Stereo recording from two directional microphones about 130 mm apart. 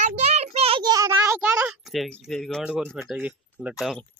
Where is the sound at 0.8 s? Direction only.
25° right (ahead or behind).